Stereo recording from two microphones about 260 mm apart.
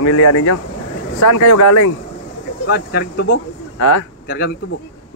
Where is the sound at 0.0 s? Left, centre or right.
Left.